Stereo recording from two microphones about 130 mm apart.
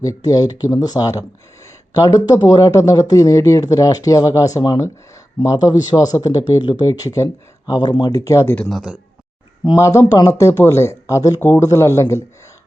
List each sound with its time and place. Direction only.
0.0 s speech: 25° left (ahead or behind)
8.7 s a man's voice: 5° right (ahead or behind)
9.7 s speech: 20° left (ahead or behind)